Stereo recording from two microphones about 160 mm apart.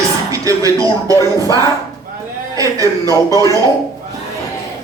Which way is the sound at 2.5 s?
20° right (ahead or behind).